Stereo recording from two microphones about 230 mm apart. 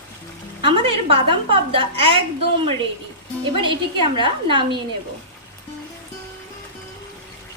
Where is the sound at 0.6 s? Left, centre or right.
Right.